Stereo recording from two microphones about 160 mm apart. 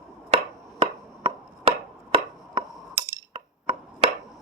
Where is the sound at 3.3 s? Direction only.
35° right (ahead or behind).